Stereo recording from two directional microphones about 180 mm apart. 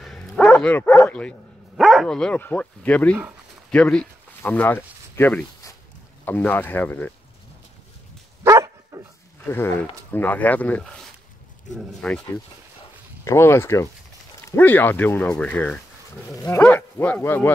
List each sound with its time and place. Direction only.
0.0 s dog: centre (ahead or behind)
1.8 s speech: centre (ahead or behind)
8.5 s dog: 20° right (ahead or behind)
9.5 s speech: 15° left (ahead or behind)
13.2 s speech: 15° left (ahead or behind)